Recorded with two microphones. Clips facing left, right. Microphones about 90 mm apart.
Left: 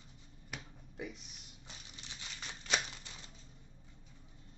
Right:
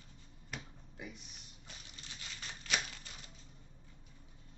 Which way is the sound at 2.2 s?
25° left (ahead or behind).